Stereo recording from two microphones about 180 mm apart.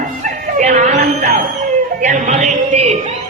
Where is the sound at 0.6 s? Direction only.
40° right (ahead or behind).